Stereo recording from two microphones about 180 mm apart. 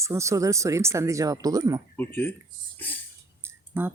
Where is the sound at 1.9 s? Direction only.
10° left (ahead or behind).